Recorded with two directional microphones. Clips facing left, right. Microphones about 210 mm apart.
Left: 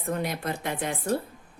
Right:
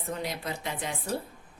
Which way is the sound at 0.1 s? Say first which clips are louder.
Left 5 dB; 55° left (ahead or behind).